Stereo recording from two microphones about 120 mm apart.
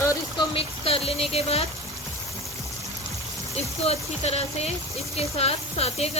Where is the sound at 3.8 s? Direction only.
60° left (ahead or behind).